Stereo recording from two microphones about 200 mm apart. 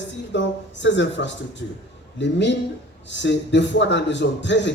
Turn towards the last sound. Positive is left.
turn(degrees=65)  # may be behind; listen again after turning